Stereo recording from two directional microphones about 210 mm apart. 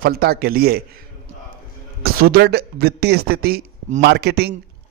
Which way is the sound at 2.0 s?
45° right (ahead or behind).